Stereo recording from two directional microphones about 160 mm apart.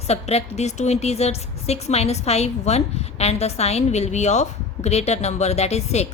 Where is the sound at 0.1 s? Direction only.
40° left (ahead or behind).